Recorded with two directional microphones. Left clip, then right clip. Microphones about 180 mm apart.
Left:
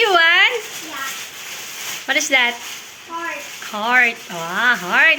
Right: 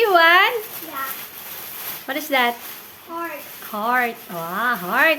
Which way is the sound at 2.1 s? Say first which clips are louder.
Left 4 dB; 25° right (ahead or behind).